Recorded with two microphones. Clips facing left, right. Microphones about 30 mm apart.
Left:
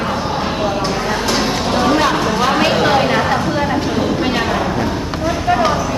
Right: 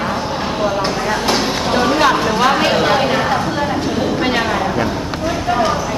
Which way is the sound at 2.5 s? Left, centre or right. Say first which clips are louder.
Left 1 dB; centre.